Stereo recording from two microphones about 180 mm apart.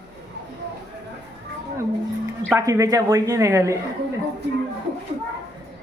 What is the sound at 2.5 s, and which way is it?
A man's voice, 20° right (ahead or behind).